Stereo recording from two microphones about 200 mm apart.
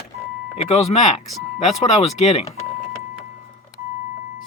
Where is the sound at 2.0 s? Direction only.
35° left (ahead or behind).